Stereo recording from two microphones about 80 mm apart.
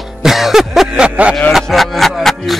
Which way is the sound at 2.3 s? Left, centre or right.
Centre.